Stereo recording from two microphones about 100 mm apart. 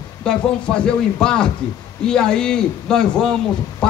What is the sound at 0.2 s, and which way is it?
A man's voice, 10° left (ahead or behind).